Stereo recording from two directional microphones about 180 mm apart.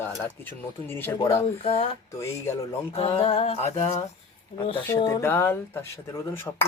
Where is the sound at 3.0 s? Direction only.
35° left (ahead or behind).